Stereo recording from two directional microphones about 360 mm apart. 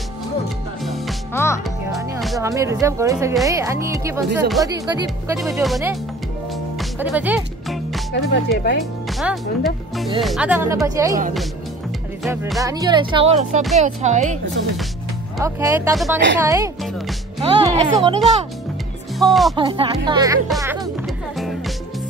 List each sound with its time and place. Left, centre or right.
0.8 s music: centre
2.0 s speech: centre
5.4 s speech: centre
6.8 s music: centre
8.1 s speech: left
9.2 s speech: centre
12.2 s speech: centre
15.3 s speech: centre
17.4 s music: centre
19.1 s speech: centre
19.5 s speech: centre
20.4 s speech: centre
21.4 s music: centre